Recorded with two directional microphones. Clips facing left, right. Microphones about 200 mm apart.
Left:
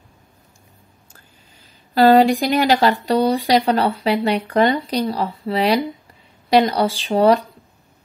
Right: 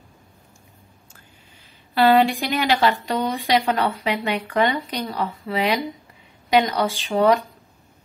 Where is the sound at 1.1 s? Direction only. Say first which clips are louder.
Even; 40° left (ahead or behind).